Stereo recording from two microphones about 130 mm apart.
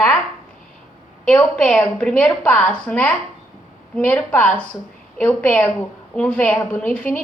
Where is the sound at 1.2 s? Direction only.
5° left (ahead or behind).